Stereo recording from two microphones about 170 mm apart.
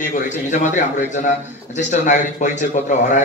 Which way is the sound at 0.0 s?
45° left (ahead or behind).